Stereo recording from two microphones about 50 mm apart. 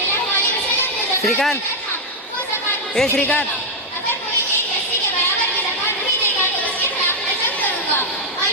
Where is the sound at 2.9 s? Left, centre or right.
Centre.